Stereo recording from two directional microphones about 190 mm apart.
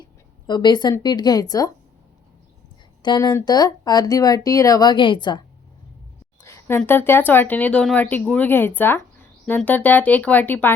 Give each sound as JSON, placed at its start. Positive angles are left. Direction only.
{"t": 0.4, "sound": "speech", "side_deg": 20}
{"t": 3.0, "sound": "speech", "side_deg": 20}
{"t": 6.4, "sound": "speech", "side_deg": 15}